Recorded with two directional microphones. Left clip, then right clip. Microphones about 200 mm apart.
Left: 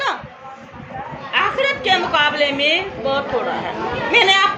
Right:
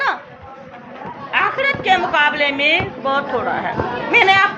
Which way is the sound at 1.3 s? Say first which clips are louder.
Right 1 dB; 10° right (ahead or behind).